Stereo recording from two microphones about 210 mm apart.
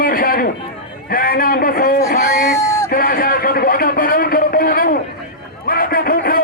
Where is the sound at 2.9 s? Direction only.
45° left (ahead or behind).